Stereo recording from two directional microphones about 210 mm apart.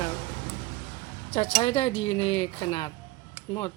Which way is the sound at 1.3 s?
25° left (ahead or behind).